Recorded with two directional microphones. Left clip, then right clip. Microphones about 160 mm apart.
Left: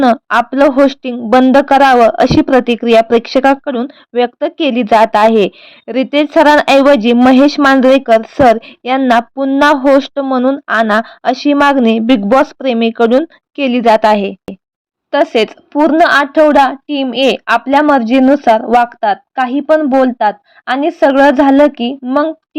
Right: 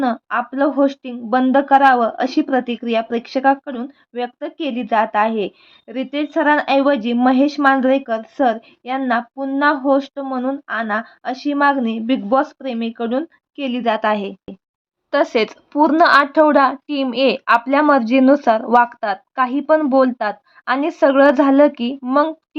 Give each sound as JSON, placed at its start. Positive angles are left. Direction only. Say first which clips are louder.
{"t": 0.0, "sound": "speech", "louder": "left 10 dB", "side_deg": 45}
{"t": 15.1, "sound": "a woman's voice", "louder": "left 6 dB", "side_deg": 15}